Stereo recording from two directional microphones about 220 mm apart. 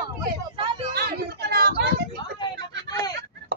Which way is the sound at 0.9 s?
45° right (ahead or behind).